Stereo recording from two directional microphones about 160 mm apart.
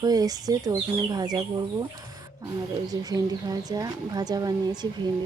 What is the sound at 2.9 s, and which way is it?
Speech, 25° right (ahead or behind).